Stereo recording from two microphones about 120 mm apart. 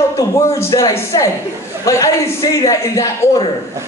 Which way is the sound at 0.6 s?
25° left (ahead or behind).